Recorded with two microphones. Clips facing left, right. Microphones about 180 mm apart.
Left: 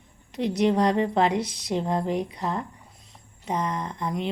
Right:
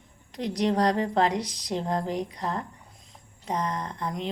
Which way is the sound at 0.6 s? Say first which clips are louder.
Left 2 dB; 35° right (ahead or behind).